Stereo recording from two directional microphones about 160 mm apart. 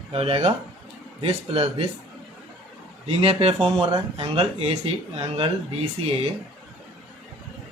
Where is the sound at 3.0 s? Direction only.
35° right (ahead or behind).